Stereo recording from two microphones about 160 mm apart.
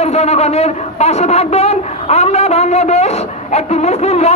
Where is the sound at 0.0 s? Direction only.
40° left (ahead or behind).